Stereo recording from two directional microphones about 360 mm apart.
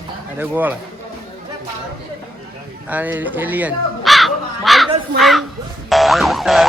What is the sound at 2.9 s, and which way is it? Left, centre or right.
Speech, centre.